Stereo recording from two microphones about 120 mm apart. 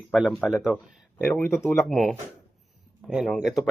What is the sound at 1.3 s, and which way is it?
Speech, 20° left (ahead or behind).